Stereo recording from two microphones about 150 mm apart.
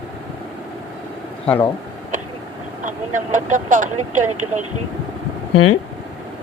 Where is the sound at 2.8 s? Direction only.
55° right (ahead or behind).